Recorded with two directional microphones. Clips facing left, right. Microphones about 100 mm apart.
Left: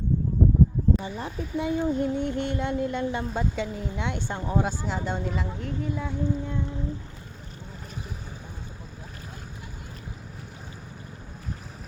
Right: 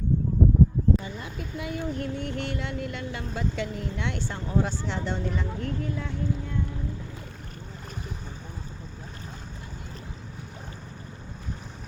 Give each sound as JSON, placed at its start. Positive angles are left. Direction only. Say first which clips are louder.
{"t": 1.2, "sound": "speech", "louder": "left 6 dB", "side_deg": 30}